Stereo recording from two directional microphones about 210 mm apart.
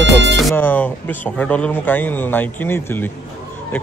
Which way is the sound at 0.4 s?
5° left (ahead or behind).